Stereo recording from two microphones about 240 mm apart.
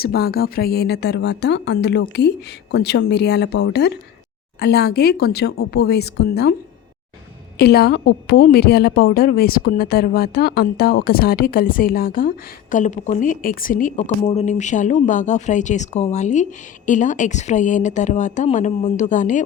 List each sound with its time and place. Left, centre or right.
0.0 s a woman's voice: left
7.6 s a woman's voice: left